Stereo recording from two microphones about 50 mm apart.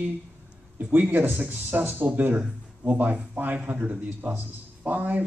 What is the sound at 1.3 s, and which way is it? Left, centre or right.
A man's voice, right.